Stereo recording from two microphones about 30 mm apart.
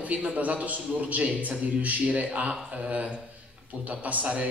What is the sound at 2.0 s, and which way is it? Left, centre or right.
A man's voice, right.